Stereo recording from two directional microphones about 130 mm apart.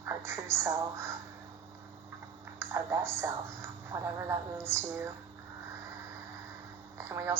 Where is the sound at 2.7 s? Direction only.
20° right (ahead or behind).